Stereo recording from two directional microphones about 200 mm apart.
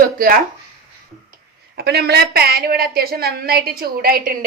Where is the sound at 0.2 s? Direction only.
45° right (ahead or behind).